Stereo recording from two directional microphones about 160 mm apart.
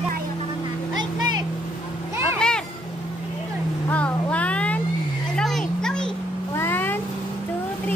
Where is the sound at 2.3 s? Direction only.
5° left (ahead or behind).